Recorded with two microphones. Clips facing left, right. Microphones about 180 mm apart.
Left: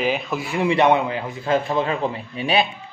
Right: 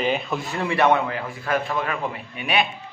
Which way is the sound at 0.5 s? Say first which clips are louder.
Left 3 dB; 20° left (ahead or behind).